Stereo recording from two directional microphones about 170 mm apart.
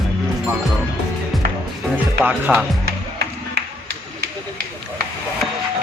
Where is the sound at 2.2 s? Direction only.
5° right (ahead or behind).